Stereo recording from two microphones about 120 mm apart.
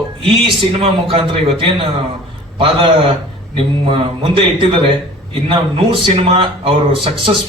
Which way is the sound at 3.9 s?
50° right (ahead or behind).